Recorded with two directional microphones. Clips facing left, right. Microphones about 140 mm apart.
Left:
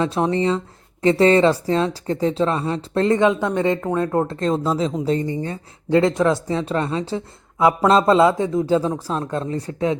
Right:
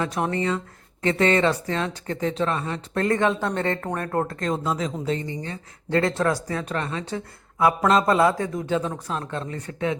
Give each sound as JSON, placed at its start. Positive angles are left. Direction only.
{"t": 0.0, "sound": "speech", "side_deg": 25}
{"t": 4.4, "sound": "speech", "side_deg": 30}
{"t": 5.9, "sound": "speech", "side_deg": 20}
{"t": 8.6, "sound": "speech", "side_deg": 35}